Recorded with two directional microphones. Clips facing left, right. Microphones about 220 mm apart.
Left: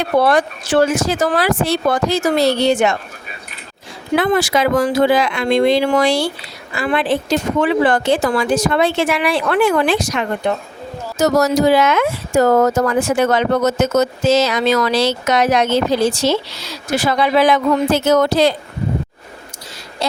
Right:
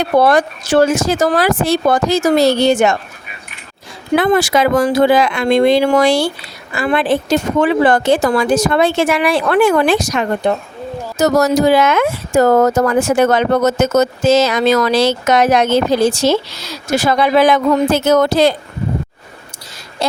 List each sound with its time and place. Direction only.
0.2 s speech: 45° right (ahead or behind)
4.2 s speech: 50° right (ahead or behind)
20.0 s a sound: 50° right (ahead or behind)